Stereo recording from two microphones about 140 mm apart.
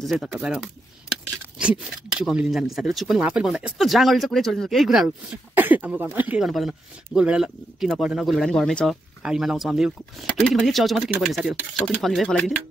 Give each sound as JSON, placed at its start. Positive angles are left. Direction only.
{"t": 0.0, "sound": "speech", "side_deg": 0}